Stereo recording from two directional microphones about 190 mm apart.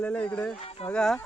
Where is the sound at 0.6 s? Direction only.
30° left (ahead or behind).